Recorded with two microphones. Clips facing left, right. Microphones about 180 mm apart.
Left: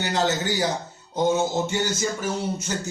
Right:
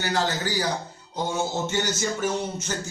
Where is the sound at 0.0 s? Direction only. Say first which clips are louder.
Left 2 dB; 25° left (ahead or behind).